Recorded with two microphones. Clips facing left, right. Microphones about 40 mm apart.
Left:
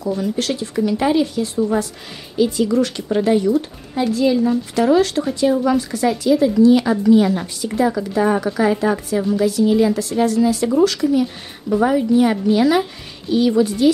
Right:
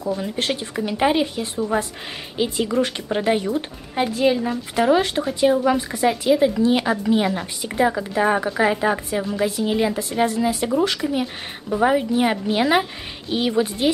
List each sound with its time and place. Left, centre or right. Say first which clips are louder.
0.2 s speech: left 3 dB; right